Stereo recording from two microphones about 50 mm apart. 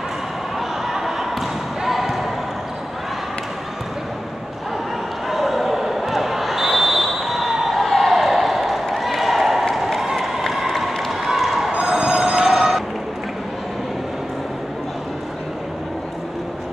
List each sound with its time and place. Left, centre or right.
0.6 s basketball bounce: centre
5.3 s basketball bounce: centre
10.9 s run: centre
11.7 s telephone bell ringing: centre